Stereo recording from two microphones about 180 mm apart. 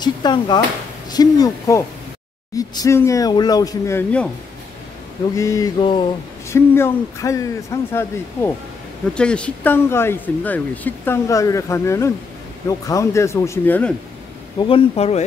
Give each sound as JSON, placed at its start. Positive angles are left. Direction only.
{"t": 0.0, "sound": "speech", "side_deg": 25}
{"t": 5.3, "sound": "speech", "side_deg": 15}
{"t": 6.5, "sound": "speech", "side_deg": 15}
{"t": 14.6, "sound": "speech", "side_deg": 35}